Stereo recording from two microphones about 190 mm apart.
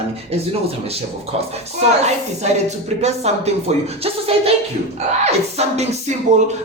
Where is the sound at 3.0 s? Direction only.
35° right (ahead or behind).